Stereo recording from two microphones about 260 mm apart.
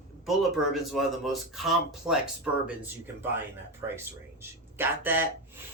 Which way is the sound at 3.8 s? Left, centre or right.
Centre.